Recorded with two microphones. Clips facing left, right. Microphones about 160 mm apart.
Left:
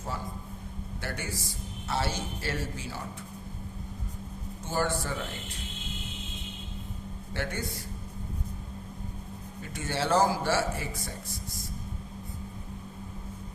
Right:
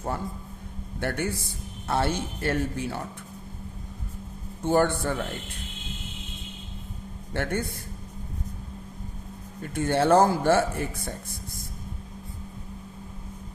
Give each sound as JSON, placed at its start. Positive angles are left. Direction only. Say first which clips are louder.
{"t": 1.0, "sound": "speech", "louder": "right 8 dB", "side_deg": -55}
{"t": 4.6, "sound": "speech", "louder": "right 8 dB", "side_deg": -60}
{"t": 7.3, "sound": "speech", "louder": "right 6 dB", "side_deg": -55}
{"t": 9.6, "sound": "speech", "louder": "right 8 dB", "side_deg": -55}